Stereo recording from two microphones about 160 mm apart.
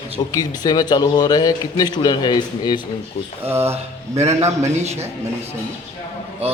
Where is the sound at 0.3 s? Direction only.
25° left (ahead or behind).